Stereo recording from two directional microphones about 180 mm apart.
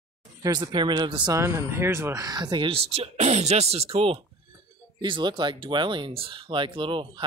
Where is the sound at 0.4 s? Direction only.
25° right (ahead or behind).